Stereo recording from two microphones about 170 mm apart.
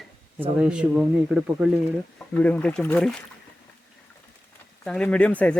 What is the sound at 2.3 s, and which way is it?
Speech, 10° left (ahead or behind).